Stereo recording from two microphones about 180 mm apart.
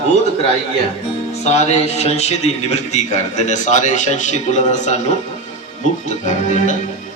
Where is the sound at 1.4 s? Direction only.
40° left (ahead or behind).